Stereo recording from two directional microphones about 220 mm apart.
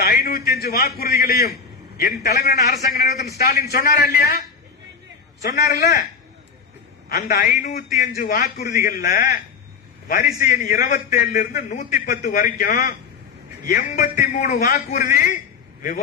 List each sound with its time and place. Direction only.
0.0 s a sound: 45° left (ahead or behind)
0.6 s a man's voice: 45° left (ahead or behind)
7.1 s a man's voice: 40° left (ahead or behind)